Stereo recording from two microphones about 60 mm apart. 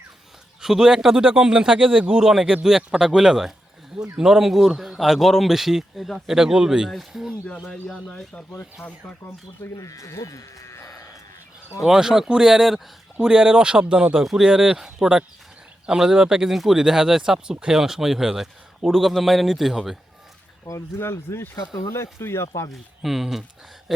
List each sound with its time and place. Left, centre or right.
0.6 s speech: centre
2.2 s speech: centre
8.2 s speech: centre
8.8 s speech: left
9.6 s speech: left
11.8 s speech: centre
13.1 s speech: centre
14.2 s speech: centre
20.7 s speech: left
21.0 s speech: left
21.5 s speech: left
21.9 s speech: left
22.7 s speech: centre